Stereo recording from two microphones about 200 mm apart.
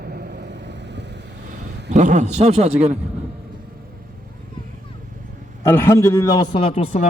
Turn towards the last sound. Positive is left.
turn(degrees=30)  # may be behind; listen again after turning